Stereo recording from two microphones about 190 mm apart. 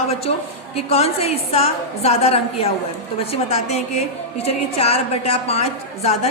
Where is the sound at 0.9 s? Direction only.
30° left (ahead or behind).